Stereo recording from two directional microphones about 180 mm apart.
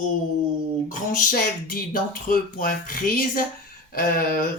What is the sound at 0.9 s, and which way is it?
Speech, 45° left (ahead or behind).